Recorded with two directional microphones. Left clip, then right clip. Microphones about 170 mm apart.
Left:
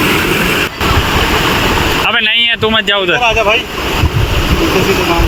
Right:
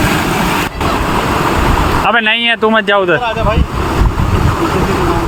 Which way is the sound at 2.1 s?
25° right (ahead or behind).